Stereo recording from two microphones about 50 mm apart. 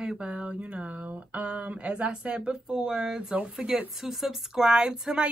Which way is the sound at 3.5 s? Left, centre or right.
Centre.